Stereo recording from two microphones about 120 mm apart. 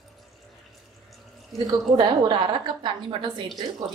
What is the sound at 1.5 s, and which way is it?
A woman's voice, 30° right (ahead or behind).